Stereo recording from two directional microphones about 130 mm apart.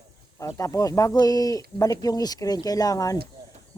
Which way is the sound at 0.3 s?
25° left (ahead or behind).